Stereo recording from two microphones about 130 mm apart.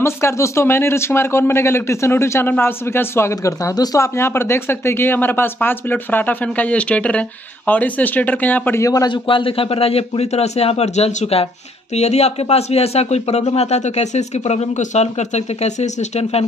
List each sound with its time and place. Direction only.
0.0 s speech: 20° left (ahead or behind)
9.1 s a man's voice: 40° left (ahead or behind)